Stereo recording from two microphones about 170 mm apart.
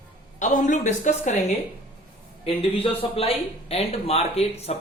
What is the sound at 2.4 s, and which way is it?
Speech, 35° left (ahead or behind).